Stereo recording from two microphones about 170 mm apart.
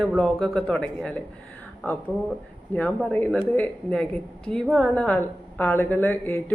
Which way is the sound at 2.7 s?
10° left (ahead or behind).